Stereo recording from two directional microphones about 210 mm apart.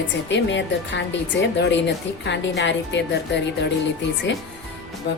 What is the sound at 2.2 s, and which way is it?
Speech, 55° left (ahead or behind).